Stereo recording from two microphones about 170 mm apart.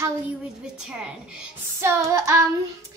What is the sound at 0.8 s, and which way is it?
A woman's voice, 5° right (ahead or behind).